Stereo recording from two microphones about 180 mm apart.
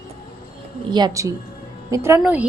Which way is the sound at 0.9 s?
25° right (ahead or behind).